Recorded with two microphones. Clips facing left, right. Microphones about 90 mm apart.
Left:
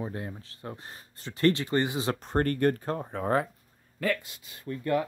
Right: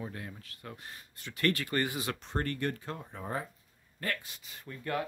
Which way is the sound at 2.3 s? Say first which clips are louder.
Left 9 dB; 45° left (ahead or behind).